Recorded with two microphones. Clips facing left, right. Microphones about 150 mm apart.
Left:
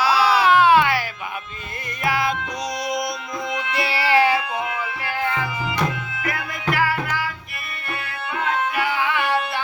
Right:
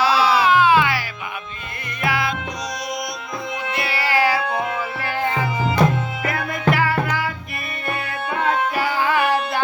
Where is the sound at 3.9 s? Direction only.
30° left (ahead or behind).